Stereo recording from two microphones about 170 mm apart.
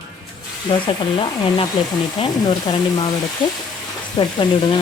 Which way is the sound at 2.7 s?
30° left (ahead or behind).